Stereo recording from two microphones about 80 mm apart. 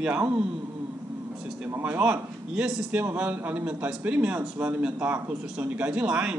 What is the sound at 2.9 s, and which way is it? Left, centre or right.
A man's voice, right.